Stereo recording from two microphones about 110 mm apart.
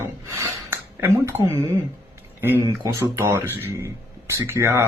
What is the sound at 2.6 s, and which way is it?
Speech, 25° right (ahead or behind).